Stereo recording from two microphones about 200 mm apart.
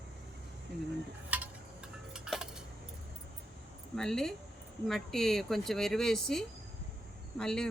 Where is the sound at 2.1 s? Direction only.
5° right (ahead or behind).